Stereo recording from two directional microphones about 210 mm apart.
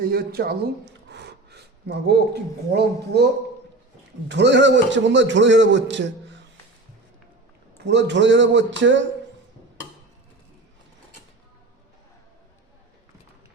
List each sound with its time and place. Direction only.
0.1 s speech: 45° right (ahead or behind)
4.3 s a man's voice: 55° right (ahead or behind)
7.9 s a man's voice: 55° right (ahead or behind)